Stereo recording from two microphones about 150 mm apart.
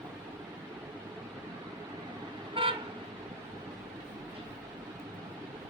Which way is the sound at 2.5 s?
35° right (ahead or behind).